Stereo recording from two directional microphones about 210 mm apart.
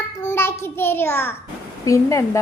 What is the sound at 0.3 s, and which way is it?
A child's voice, 10° left (ahead or behind).